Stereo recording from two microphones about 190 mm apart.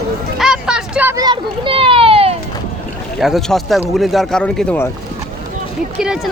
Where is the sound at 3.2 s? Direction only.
Centre (ahead or behind).